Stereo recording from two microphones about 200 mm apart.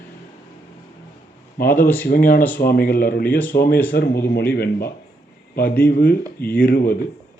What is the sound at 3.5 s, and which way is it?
Speech, 50° left (ahead or behind).